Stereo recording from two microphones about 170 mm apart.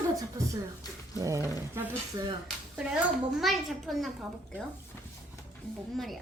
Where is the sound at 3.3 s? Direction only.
Centre (ahead or behind).